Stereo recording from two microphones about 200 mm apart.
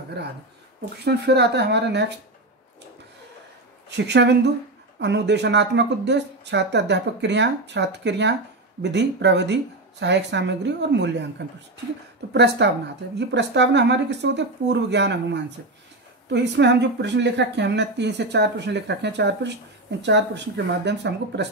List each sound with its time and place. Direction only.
1.0 s speech: 55° right (ahead or behind)
3.9 s speech: 60° right (ahead or behind)
12.3 s speech: 60° right (ahead or behind)